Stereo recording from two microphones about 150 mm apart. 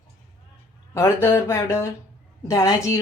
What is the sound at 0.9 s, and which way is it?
A woman's voice, 15° left (ahead or behind).